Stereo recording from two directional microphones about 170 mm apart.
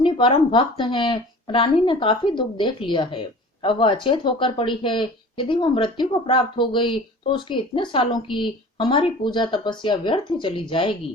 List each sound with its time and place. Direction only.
0.0 s speech: 30° left (ahead or behind)